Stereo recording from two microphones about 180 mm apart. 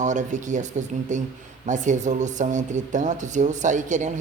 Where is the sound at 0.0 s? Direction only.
40° right (ahead or behind).